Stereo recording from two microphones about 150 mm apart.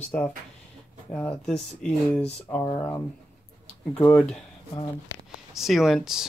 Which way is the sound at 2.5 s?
20° left (ahead or behind).